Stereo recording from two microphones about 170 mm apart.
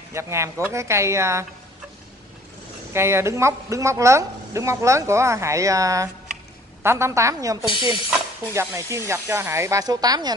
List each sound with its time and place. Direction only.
0.1 s speech: 15° right (ahead or behind)
2.9 s speech: 15° right (ahead or behind)
7.6 s speech: 30° left (ahead or behind)
8.5 s speech: 15° right (ahead or behind)